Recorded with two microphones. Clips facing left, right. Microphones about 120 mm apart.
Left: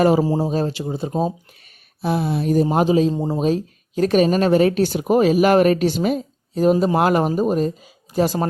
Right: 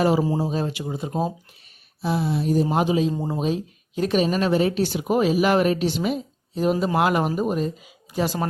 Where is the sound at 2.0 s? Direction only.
55° left (ahead or behind); by 3.1 s 40° left (ahead or behind).